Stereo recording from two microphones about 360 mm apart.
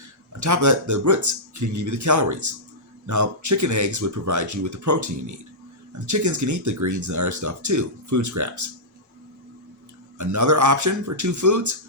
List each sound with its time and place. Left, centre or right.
0.3 s speech: right
10.2 s speech: right